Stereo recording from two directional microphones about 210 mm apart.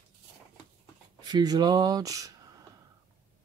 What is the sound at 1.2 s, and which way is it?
Speech, 20° right (ahead or behind).